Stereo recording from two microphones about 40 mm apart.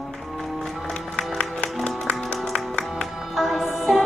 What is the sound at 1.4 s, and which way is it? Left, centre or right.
Music, left.